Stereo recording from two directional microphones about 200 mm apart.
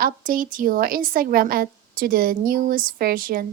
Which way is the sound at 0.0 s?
45° right (ahead or behind).